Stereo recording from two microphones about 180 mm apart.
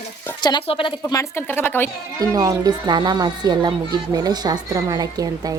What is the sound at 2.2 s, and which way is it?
Speech, 20° right (ahead or behind).